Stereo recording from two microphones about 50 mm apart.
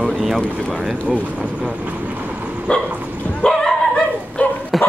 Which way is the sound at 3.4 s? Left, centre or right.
Centre.